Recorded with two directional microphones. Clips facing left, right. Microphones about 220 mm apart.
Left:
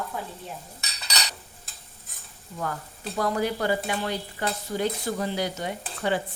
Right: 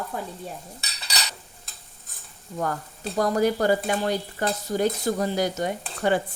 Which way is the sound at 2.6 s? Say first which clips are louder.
Right 4 dB; 45° right (ahead or behind).